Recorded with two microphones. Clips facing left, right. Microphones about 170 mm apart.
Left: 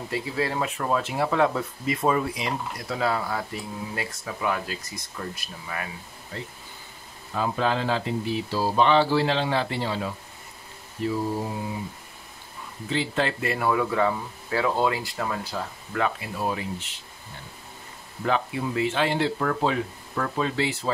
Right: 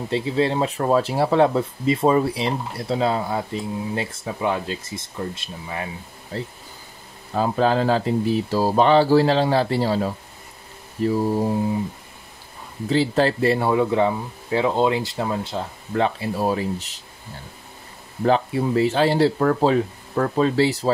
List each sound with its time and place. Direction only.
0.1 s speech: 25° right (ahead or behind); by 11.1 s 40° right (ahead or behind)
12.9 s speech: 35° right (ahead or behind)
18.2 s speech: 35° right (ahead or behind)